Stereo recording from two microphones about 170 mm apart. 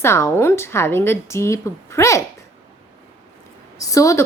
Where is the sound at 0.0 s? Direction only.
15° left (ahead or behind).